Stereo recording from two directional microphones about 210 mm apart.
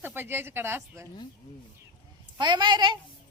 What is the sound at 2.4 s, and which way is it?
Speech, 20° right (ahead or behind).